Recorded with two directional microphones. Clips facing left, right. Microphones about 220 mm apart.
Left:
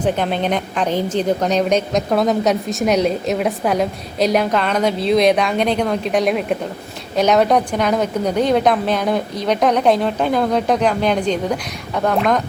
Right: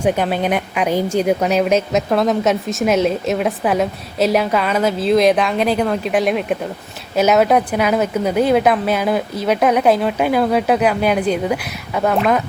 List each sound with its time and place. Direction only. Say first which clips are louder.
0.0 s a woman's voice: right 1 dB; 10° right (ahead or behind)